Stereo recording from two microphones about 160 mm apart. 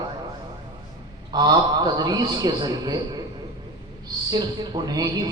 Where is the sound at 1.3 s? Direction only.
25° right (ahead or behind).